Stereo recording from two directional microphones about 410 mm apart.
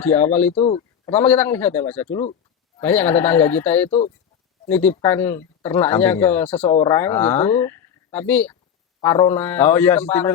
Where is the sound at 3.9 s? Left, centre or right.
Centre.